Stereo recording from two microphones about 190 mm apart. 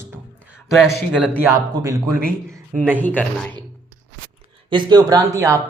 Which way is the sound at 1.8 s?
20° right (ahead or behind).